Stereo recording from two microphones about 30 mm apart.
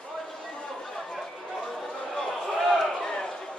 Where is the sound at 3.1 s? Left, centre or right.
Left.